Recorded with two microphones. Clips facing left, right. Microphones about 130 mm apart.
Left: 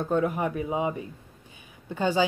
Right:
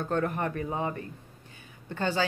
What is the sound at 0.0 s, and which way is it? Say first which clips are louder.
A woman's voice: left 3 dB; 10° left (ahead or behind).